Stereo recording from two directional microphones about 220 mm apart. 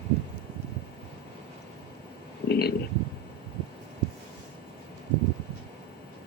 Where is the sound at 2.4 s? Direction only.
45° left (ahead or behind).